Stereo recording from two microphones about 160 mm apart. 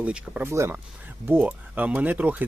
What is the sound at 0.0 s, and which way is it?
A man's voice, 10° right (ahead or behind).